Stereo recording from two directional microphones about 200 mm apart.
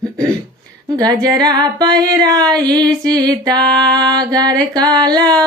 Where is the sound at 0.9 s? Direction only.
20° right (ahead or behind).